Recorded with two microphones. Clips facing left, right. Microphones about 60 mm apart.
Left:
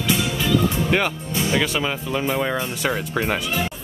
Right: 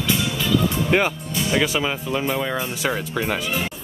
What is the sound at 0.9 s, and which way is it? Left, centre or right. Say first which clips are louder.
Speech: right 1 dB; centre.